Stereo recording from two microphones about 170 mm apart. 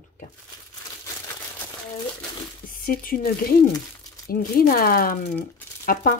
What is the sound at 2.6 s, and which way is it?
Speech, 55° left (ahead or behind).